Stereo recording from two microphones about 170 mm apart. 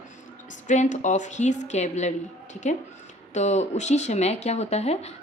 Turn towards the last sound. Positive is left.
turn(degrees=40)  # may be behind; listen again after turning